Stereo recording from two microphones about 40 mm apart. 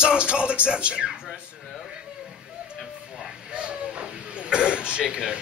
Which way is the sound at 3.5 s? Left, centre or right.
Right.